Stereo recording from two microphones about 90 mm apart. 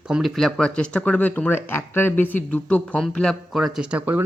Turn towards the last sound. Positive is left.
turn(degrees=-15)  # may be behind; listen again after turning